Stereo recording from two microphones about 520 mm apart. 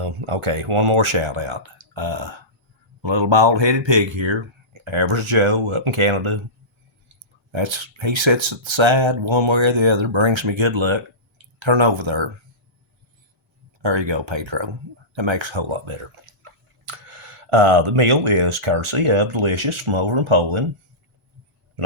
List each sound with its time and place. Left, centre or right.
0.0 s speech: right
13.8 s speech: right